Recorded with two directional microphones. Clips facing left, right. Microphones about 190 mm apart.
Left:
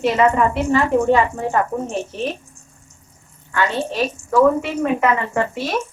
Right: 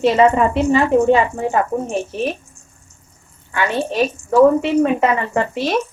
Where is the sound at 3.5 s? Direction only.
15° right (ahead or behind).